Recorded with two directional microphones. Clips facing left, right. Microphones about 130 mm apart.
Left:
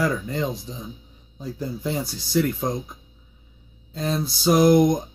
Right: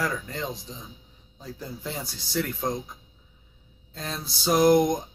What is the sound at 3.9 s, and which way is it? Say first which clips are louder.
Speech: left 10 dB; 5° left (ahead or behind).